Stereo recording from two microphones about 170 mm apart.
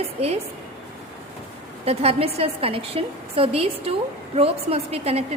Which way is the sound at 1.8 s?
35° right (ahead or behind).